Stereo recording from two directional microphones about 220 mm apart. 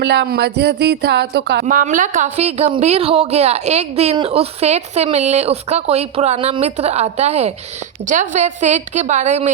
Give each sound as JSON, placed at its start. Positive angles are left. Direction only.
{"t": 0.0, "sound": "speech", "side_deg": -50}
{"t": 1.6, "sound": "a woman's voice", "side_deg": -35}